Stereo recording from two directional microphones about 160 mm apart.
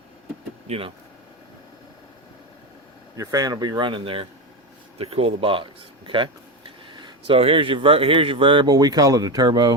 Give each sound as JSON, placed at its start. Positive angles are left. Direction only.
{"t": 0.7, "sound": "speech", "side_deg": -35}
{"t": 3.2, "sound": "speech", "side_deg": -20}